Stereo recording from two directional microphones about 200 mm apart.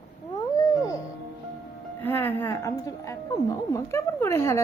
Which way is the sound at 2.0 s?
10° left (ahead or behind).